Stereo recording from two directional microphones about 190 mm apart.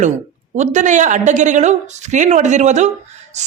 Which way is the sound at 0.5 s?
40° right (ahead or behind).